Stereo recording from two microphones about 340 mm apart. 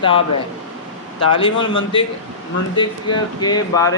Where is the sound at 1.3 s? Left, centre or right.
Centre.